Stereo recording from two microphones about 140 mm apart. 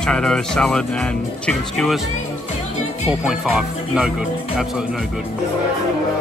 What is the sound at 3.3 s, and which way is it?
Speech, 5° right (ahead or behind).